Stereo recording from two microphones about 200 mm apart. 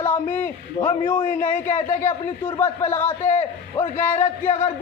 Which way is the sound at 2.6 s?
10° left (ahead or behind).